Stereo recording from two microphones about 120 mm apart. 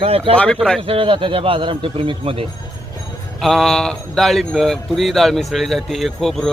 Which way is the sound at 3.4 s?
Centre (ahead or behind).